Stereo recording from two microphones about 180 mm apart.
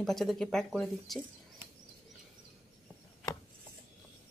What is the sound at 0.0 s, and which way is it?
Speech, centre (ahead or behind).